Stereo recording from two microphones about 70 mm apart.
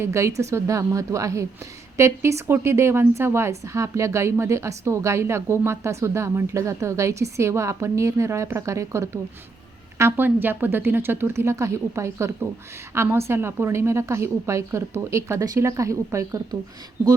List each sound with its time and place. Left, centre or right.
0.0 s a woman's voice: right
10.0 s a woman's voice: right